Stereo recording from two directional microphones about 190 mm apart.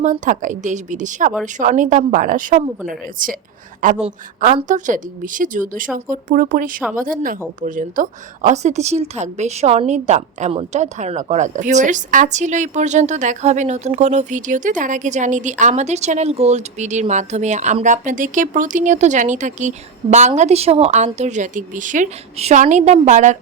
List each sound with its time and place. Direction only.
0.0 s a woman's voice: 40° right (ahead or behind)